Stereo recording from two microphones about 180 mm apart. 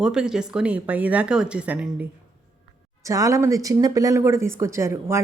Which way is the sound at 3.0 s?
20° right (ahead or behind).